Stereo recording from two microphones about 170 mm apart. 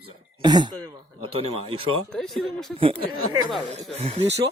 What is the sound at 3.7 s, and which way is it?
Speech, 35° right (ahead or behind).